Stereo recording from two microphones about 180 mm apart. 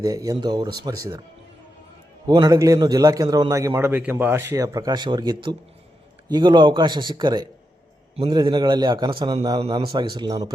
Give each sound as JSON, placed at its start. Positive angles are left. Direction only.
{"t": 0.0, "sound": "a man's voice", "side_deg": -20}
{"t": 2.2, "sound": "a man's voice", "side_deg": -25}